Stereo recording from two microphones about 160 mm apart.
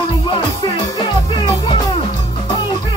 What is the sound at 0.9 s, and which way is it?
Music, 30° left (ahead or behind).